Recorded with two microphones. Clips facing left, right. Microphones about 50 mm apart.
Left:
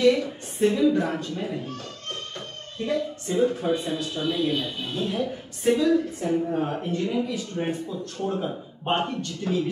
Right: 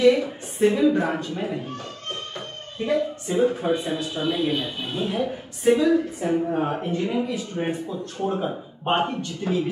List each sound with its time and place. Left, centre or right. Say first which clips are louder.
0.0 s a woman's voice: right 2 dB; centre